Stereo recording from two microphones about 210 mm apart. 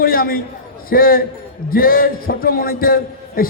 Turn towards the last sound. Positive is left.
turn(degrees=45)  # may be behind; listen again after turning